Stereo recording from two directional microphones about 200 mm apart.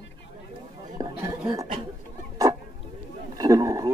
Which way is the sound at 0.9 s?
20° right (ahead or behind).